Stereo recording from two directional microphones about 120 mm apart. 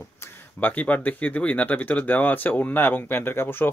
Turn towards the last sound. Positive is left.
turn(degrees=20)  # may be behind; listen again after turning